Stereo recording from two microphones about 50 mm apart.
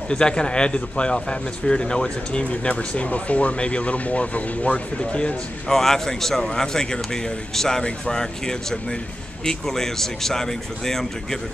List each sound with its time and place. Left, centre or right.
0.1 s speech: centre
5.7 s speech: centre